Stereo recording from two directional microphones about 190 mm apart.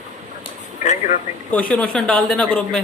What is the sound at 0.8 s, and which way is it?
Speech, 40° left (ahead or behind).